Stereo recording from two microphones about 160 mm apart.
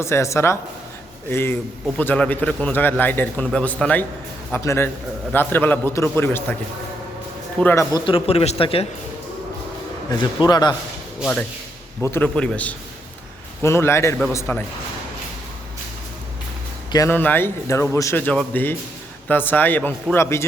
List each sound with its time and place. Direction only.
0.0 s a man's voice: 15° left (ahead or behind)
7.6 s a man's voice: 10° left (ahead or behind)
7.9 s speech: 35° left (ahead or behind)
10.1 s a man's voice: 25° left (ahead or behind)
12.0 s a man's voice: 10° left (ahead or behind)
17.1 s a man's voice: 10° left (ahead or behind)